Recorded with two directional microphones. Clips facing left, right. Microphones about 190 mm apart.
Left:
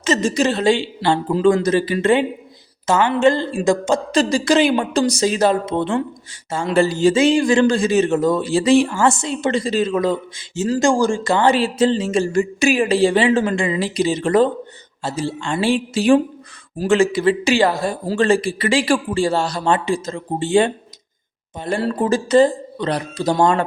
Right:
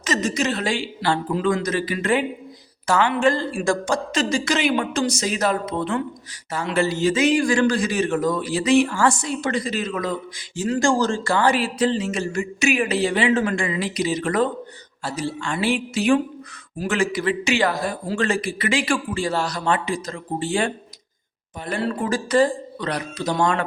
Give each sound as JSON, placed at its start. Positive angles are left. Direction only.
{"t": 0.0, "sound": "a man's voice", "side_deg": 30}
{"t": 4.1, "sound": "a man's voice", "side_deg": 35}
{"t": 21.8, "sound": "speech", "side_deg": 35}